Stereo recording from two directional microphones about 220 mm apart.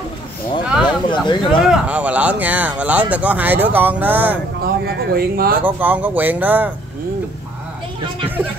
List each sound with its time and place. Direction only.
0.7 s a sound: 5° right (ahead or behind)
1.1 s speech: 20° left (ahead or behind)
1.6 s speech: 5° right (ahead or behind)
4.6 s speech: 45° right (ahead or behind)
5.6 s speech: 10° right (ahead or behind)